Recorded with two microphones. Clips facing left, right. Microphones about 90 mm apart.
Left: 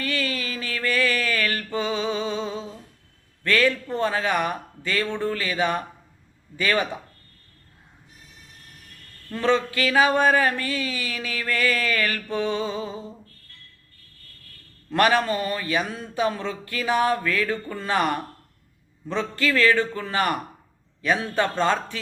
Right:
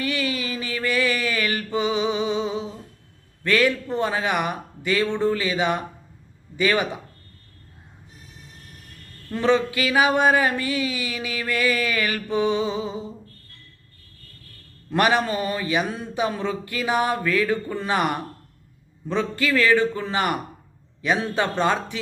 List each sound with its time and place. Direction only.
0.0 s a sound: 15° right (ahead or behind)
3.4 s speech: 15° right (ahead or behind)
9.3 s speech: 15° right (ahead or behind)
14.8 s speech: 15° right (ahead or behind)